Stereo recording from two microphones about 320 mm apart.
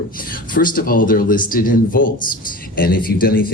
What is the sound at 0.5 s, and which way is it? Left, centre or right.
A man's voice, left.